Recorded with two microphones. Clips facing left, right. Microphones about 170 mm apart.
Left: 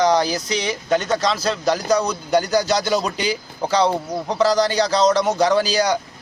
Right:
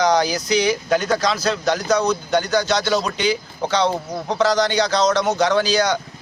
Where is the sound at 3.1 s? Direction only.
35° left (ahead or behind).